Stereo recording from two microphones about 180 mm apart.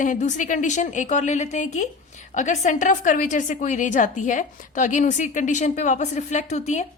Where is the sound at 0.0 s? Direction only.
45° left (ahead or behind).